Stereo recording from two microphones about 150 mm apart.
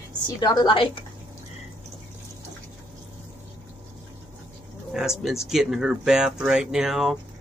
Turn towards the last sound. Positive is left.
turn(degrees=0)  # may be behind; listen again after turning